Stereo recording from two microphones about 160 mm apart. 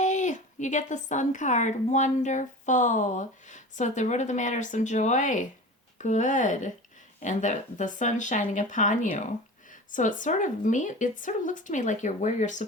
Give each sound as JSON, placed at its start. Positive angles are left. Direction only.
{"t": 0.0, "sound": "speech", "side_deg": 50}